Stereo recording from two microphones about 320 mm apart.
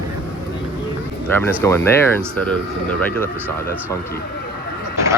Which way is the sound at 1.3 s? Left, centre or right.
Centre.